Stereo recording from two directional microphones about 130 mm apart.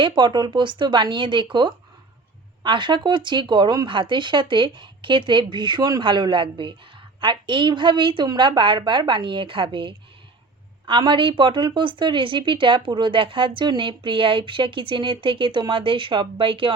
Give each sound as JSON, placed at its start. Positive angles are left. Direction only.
{"t": 0.0, "sound": "a woman's voice", "side_deg": -40}